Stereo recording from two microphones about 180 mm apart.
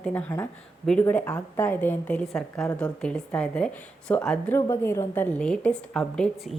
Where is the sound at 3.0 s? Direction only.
5° left (ahead or behind).